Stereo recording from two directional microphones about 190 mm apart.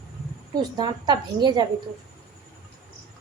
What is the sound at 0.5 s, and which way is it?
A woman's voice, 20° right (ahead or behind).